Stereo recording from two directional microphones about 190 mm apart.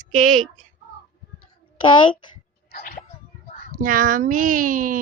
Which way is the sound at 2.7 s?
50° left (ahead or behind).